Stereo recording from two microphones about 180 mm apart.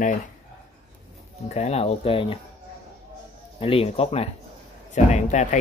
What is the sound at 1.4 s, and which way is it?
Speech, 35° left (ahead or behind).